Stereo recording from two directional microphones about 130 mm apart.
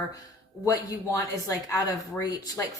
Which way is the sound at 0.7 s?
25° left (ahead or behind).